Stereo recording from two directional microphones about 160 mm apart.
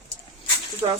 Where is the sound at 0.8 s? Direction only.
30° right (ahead or behind).